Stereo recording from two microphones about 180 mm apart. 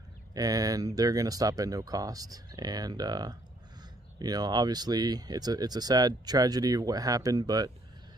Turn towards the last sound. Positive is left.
turn(degrees=-20)  # may be behind; listen again after turning